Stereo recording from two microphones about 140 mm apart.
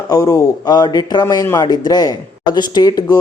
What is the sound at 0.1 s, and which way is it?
A man's voice, 25° left (ahead or behind).